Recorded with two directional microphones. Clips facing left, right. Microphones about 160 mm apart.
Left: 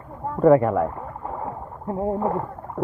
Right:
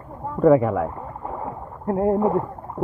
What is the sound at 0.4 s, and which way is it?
Speech, centre (ahead or behind).